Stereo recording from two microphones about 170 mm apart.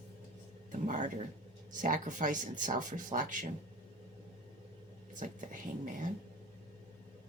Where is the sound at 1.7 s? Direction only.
50° right (ahead or behind).